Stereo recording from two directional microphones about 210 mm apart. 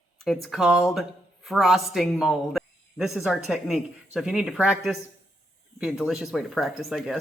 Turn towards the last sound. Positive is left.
turn(degrees=0)  # may be behind; listen again after turning